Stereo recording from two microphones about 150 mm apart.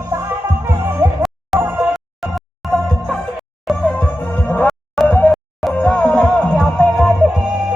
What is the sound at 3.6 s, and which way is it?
Music, 5° left (ahead or behind).